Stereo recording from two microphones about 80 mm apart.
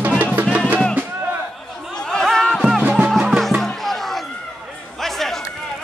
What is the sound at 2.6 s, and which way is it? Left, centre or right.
Music, centre.